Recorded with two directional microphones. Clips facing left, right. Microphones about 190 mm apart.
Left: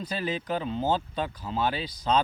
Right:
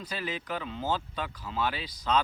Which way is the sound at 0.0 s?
25° left (ahead or behind).